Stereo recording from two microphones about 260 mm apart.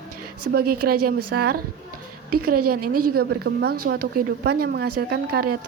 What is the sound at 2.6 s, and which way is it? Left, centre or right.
Speech, right.